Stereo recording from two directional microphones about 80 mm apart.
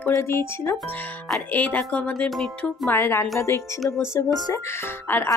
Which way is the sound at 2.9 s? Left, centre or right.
Left.